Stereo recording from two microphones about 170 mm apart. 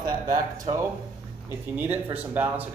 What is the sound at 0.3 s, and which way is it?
Speech, 25° right (ahead or behind).